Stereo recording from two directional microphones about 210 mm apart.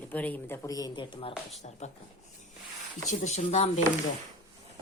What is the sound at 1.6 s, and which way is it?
Speech, 35° left (ahead or behind).